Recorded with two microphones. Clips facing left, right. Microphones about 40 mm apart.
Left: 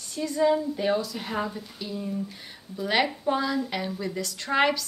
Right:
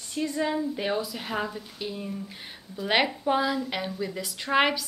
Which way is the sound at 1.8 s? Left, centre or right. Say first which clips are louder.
Left 3 dB; right.